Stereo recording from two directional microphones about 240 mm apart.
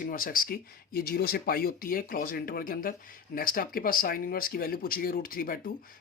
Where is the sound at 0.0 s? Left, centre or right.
Left.